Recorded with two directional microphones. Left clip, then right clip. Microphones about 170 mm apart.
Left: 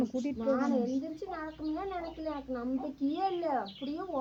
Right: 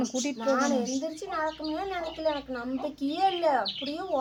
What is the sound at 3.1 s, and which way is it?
Speech, 15° right (ahead or behind).